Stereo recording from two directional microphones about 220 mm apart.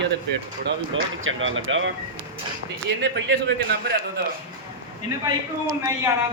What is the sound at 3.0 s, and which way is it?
Speech, 50° right (ahead or behind).